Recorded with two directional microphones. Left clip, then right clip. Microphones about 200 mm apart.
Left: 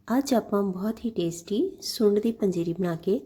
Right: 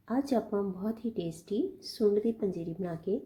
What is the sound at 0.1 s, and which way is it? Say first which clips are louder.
Speech: left 6 dB; 30° left (ahead or behind).